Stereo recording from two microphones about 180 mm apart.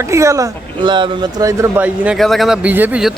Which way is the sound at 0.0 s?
15° right (ahead or behind).